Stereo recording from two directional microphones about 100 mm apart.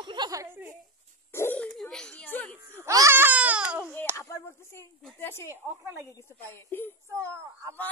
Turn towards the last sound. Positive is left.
turn(degrees=-30)  # may be behind; listen again after turning